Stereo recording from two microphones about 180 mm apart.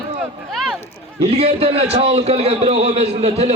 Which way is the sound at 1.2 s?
35° right (ahead or behind).